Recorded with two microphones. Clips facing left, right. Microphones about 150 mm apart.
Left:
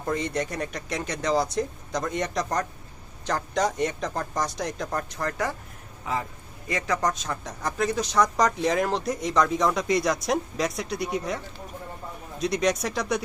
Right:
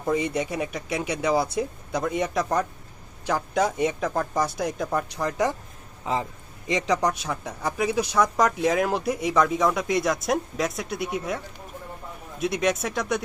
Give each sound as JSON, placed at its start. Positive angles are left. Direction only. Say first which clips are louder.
{"t": 0.0, "sound": "a woman's voice", "louder": "right 3 dB", "side_deg": -5}
{"t": 5.1, "sound": "a man's voice", "louder": "right 4 dB", "side_deg": -15}
{"t": 12.4, "sound": "a woman's voice", "louder": "even", "side_deg": -5}